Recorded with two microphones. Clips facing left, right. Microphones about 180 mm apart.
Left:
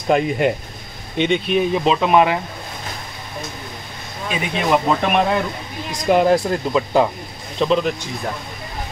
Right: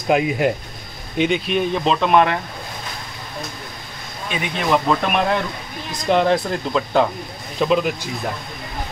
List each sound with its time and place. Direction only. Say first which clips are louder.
0.1 s speech: left 1 dB; 5° right (ahead or behind)
4.6 s speech: left 1 dB; 5° left (ahead or behind)
7.5 s speech: even; 5° right (ahead or behind)